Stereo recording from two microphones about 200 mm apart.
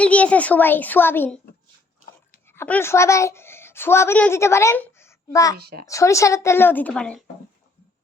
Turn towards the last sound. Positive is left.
turn(degrees=5)  # may be behind; listen again after turning